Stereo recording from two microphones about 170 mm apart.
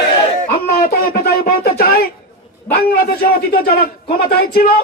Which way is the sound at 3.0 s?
60° left (ahead or behind).